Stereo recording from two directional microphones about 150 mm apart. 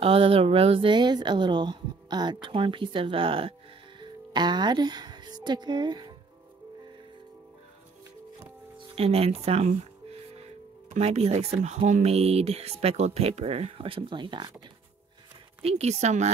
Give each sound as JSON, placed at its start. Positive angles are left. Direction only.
{"t": 0.0, "sound": "speech", "side_deg": -40}
{"t": 8.7, "sound": "speech", "side_deg": -40}
{"t": 10.9, "sound": "speech", "side_deg": -45}
{"t": 15.6, "sound": "speech", "side_deg": -45}